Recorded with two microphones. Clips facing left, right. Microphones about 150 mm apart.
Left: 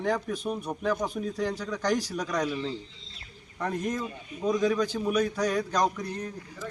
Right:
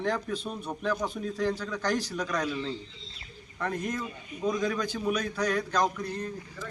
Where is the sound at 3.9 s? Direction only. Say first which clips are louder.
Left 2 dB; 10° left (ahead or behind).